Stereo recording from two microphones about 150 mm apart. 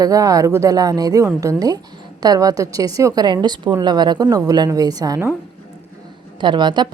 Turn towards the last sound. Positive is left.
turn(degrees=-30)  # may be behind; listen again after turning